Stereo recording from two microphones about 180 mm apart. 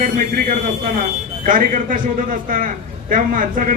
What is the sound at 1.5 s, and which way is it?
A man's voice, 50° right (ahead or behind).